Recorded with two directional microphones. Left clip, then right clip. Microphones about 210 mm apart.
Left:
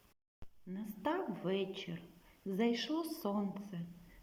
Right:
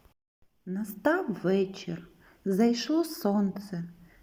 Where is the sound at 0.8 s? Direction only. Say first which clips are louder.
Right 11 dB; 20° right (ahead or behind).